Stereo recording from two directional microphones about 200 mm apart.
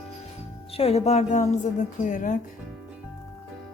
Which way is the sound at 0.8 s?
30° left (ahead or behind).